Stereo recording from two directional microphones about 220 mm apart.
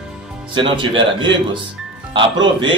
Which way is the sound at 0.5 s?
20° right (ahead or behind).